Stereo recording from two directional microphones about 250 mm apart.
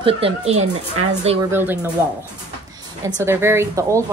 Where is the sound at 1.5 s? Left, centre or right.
Centre.